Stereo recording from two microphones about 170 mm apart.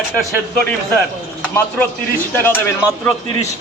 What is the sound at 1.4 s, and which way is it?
A man's voice, 10° left (ahead or behind).